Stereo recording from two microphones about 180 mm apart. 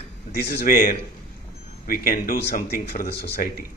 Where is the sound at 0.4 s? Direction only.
55° left (ahead or behind).